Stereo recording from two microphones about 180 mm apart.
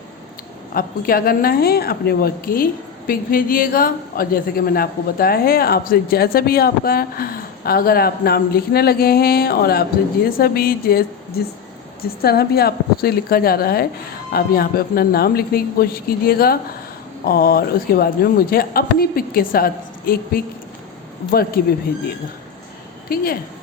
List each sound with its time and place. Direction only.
0.7 s a woman's voice: 55° left (ahead or behind)
23.0 s a woman's voice: 55° left (ahead or behind)